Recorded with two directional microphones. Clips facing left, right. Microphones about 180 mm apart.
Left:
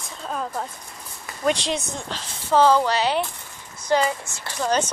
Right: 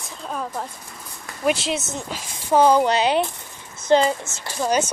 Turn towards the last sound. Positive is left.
turn(degrees=-10)  # may be behind; listen again after turning